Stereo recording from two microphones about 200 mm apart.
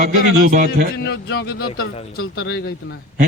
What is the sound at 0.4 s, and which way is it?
Speech, 45° right (ahead or behind).